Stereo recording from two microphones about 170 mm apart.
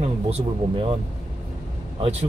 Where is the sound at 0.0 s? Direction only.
35° right (ahead or behind).